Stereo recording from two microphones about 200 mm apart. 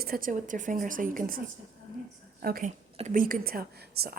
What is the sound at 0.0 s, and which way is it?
A woman's voice, 45° right (ahead or behind).